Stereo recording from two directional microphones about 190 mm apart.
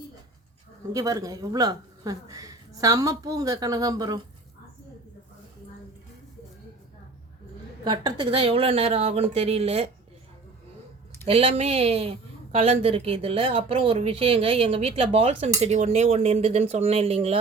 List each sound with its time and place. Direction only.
0.9 s speech: 20° right (ahead or behind)
7.9 s a woman's voice: 25° right (ahead or behind)
11.3 s a woman's voice: 30° right (ahead or behind)